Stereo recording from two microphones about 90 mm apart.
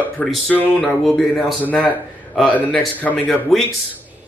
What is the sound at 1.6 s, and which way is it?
Speech, 15° left (ahead or behind).